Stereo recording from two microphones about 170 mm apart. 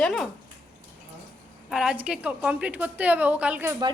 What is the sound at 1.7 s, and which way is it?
A woman's voice, 5° right (ahead or behind).